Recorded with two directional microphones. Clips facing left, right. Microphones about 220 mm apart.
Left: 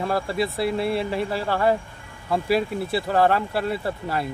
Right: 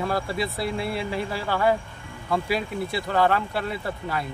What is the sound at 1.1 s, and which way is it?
Speech, 30° left (ahead or behind).